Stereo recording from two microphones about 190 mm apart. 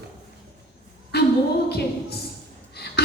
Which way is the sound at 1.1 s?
60° left (ahead or behind).